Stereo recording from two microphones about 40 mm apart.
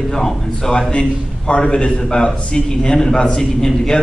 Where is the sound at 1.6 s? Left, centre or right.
Left.